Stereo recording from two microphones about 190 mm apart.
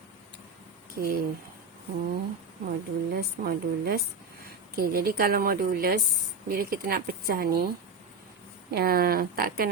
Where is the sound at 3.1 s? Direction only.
55° right (ahead or behind).